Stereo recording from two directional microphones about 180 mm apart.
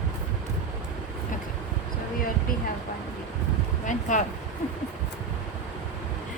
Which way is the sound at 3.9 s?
45° left (ahead or behind).